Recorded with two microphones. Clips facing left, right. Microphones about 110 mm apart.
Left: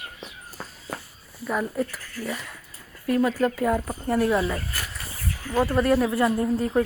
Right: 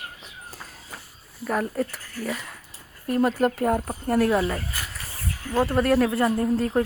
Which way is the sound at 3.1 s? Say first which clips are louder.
Even; 45° right (ahead or behind).